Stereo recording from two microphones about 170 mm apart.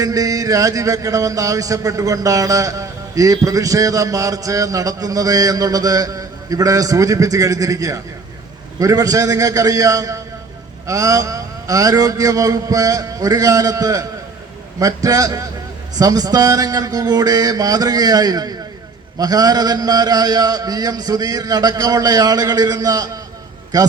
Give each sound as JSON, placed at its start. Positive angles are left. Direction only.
{"t": 0.0, "sound": "speech", "side_deg": -20}